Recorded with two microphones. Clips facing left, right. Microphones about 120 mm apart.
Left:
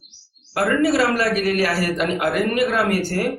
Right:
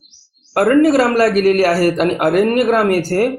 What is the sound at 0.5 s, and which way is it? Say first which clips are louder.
Speech: right 7 dB; 50° right (ahead or behind).